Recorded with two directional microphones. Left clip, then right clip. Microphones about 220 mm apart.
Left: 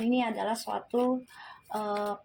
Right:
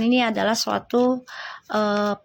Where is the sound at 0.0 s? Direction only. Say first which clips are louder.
Right 9 dB; 30° right (ahead or behind).